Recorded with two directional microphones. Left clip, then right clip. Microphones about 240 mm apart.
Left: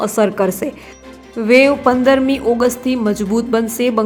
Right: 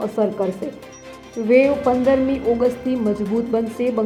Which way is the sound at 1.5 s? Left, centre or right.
Centre.